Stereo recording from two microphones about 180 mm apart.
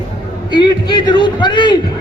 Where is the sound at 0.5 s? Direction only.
25° left (ahead or behind).